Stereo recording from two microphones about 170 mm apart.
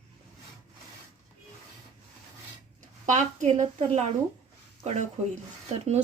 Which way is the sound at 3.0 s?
45° right (ahead or behind).